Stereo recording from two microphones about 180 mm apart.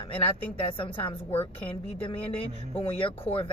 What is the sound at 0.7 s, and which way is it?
A woman's voice, 30° left (ahead or behind).